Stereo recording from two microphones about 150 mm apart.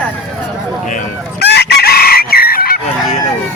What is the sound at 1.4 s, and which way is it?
Chicken, 90° left.